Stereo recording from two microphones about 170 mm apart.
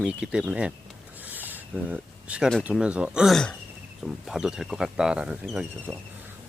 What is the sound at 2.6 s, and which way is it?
Speech, 5° right (ahead or behind).